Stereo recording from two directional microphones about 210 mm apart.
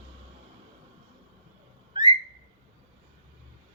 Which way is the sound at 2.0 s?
20° right (ahead or behind).